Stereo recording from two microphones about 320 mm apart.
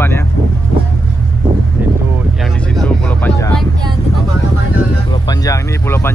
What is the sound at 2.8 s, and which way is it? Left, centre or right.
Music, centre.